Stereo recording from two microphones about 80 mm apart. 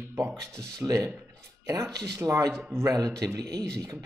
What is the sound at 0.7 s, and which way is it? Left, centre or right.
Speech, right.